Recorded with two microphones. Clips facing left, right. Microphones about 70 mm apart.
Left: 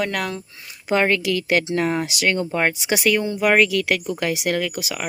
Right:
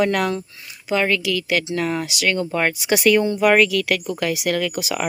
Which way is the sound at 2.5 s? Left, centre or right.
Centre.